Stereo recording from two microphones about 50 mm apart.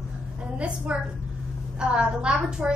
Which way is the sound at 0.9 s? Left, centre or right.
Right.